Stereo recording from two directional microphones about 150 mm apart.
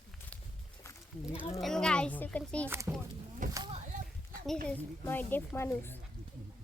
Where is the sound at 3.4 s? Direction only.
60° right (ahead or behind).